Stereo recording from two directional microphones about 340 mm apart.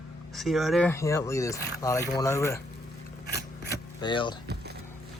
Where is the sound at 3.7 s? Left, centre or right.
Centre.